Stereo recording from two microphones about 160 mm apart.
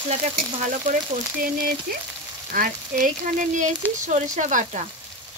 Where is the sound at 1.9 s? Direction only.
65° right (ahead or behind).